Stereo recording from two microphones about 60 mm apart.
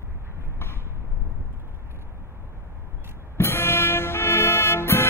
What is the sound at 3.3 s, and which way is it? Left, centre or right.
Music, left.